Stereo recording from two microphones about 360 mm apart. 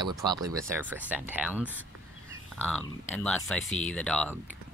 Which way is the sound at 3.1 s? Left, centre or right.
Centre.